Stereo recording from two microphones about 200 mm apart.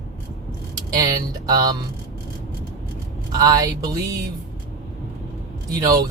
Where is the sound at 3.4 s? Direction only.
20° right (ahead or behind).